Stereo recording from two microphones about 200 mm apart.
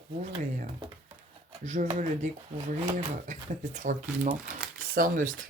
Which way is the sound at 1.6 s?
35° right (ahead or behind).